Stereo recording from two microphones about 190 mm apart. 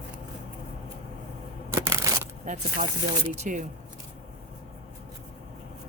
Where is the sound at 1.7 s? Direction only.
15° right (ahead or behind).